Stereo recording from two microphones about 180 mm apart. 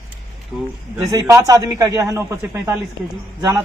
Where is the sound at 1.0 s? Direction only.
15° right (ahead or behind).